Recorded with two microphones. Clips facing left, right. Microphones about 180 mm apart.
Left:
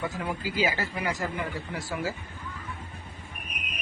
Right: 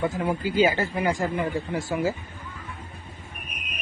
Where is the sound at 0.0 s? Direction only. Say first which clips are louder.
Right 6 dB; 25° right (ahead or behind).